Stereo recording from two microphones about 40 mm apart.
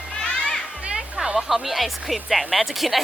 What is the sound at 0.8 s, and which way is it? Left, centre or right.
Music, right.